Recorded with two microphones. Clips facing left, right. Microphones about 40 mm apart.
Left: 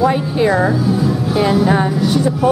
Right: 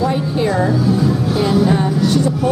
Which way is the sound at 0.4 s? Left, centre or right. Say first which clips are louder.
Left 2 dB; centre.